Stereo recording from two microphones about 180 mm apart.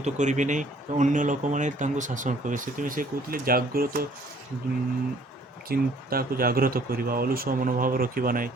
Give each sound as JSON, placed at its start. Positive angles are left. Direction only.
{"t": 0.0, "sound": "speech", "side_deg": -40}
{"t": 5.6, "sound": "speech", "side_deg": -55}